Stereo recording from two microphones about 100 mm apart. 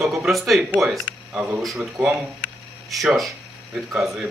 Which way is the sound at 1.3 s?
15° right (ahead or behind).